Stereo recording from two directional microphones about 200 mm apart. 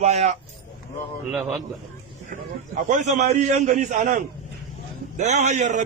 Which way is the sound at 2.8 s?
35° right (ahead or behind).